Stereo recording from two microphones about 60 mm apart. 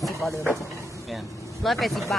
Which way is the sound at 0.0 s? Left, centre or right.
Centre.